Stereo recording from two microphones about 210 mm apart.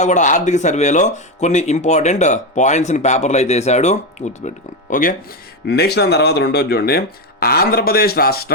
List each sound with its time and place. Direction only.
0.0 s speech: 35° left (ahead or behind)
5.6 s speech: 50° left (ahead or behind)